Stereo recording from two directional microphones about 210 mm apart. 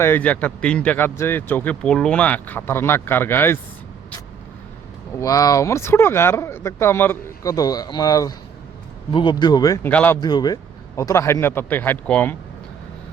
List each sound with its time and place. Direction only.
0.0 s speech: 10° left (ahead or behind)
5.2 s speech: 15° left (ahead or behind)
10.2 s speech: 20° left (ahead or behind)